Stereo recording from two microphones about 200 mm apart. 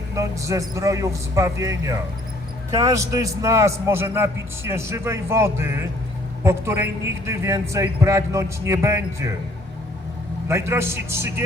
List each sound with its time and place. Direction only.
0.2 s a man's voice: 15° right (ahead or behind)
10.5 s a man's voice: 15° right (ahead or behind)